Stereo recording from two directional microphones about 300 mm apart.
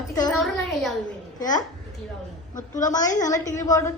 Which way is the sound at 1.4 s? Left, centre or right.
Centre.